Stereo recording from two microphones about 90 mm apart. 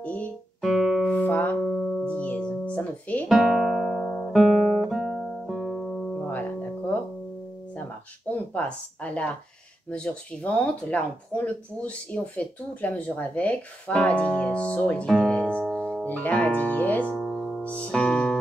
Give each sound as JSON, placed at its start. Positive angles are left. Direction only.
{"t": 0.0, "sound": "speech", "side_deg": 15}
{"t": 0.6, "sound": "music", "side_deg": 0}
{"t": 1.0, "sound": "music", "side_deg": 20}
{"t": 1.7, "sound": "music", "side_deg": 0}
{"t": 2.0, "sound": "music", "side_deg": 15}
{"t": 3.3, "sound": "guitar", "side_deg": -5}
{"t": 4.9, "sound": "music", "side_deg": 0}
{"t": 8.3, "sound": "speech", "side_deg": 15}
{"t": 17.1, "sound": "music", "side_deg": 0}
{"t": 17.6, "sound": "speech", "side_deg": 15}